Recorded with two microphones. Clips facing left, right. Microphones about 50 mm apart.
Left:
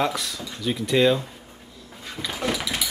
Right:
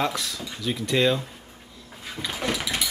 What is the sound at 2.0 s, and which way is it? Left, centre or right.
Dog, centre.